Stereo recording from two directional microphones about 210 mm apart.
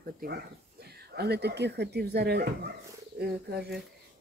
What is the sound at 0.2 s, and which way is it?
Speech, 50° right (ahead or behind).